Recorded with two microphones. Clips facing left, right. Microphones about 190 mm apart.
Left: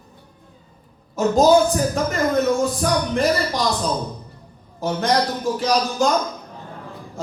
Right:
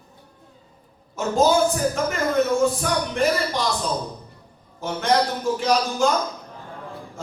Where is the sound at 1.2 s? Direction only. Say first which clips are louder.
Left 4 dB; 40° left (ahead or behind).